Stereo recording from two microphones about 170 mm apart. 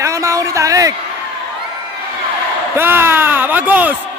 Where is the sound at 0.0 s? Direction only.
20° right (ahead or behind).